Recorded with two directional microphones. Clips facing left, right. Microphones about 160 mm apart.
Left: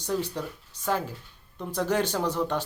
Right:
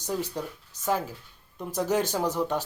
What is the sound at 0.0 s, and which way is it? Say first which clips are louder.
Speech: left 1 dB; 10° right (ahead or behind).